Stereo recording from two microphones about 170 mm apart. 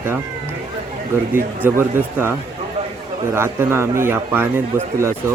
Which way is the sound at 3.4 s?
15° right (ahead or behind).